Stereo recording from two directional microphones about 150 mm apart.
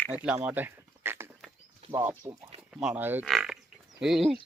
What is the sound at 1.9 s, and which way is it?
Speech, 15° right (ahead or behind).